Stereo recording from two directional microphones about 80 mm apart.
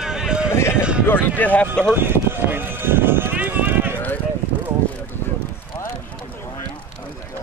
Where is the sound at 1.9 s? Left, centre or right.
Right.